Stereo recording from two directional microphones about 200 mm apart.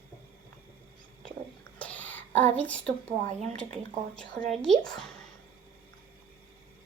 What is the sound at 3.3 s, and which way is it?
Speech, 35° right (ahead or behind).